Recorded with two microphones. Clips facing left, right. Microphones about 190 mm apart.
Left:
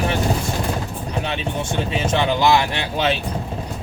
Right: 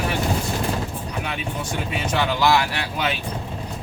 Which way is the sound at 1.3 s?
25° left (ahead or behind).